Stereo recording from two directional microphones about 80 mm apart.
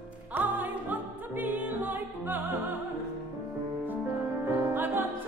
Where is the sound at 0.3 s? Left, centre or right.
Right.